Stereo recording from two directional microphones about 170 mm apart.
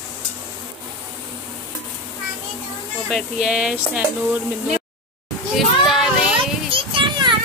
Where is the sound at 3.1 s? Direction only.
5° right (ahead or behind).